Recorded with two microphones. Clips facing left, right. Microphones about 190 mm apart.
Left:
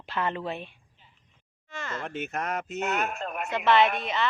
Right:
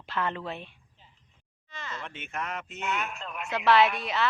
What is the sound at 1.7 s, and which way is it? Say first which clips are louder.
Speech: left 6 dB; 50° left (ahead or behind).